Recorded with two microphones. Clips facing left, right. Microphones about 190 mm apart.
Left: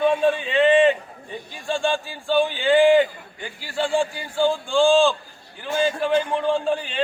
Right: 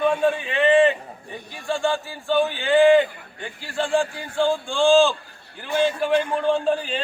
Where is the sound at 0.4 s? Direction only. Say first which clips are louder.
Even; 20° left (ahead or behind).